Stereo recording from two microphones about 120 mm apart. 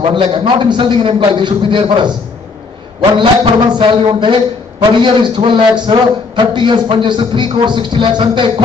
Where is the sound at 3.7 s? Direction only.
40° right (ahead or behind).